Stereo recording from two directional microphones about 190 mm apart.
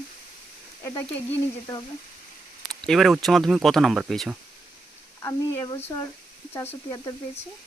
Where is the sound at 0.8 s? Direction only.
15° left (ahead or behind).